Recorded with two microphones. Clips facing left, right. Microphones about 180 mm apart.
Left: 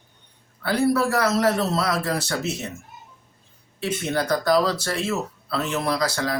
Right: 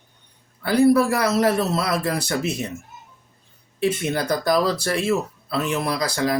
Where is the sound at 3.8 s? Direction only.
10° right (ahead or behind).